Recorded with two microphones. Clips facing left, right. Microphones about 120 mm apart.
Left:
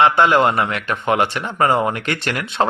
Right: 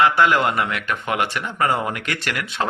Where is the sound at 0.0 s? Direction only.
25° left (ahead or behind).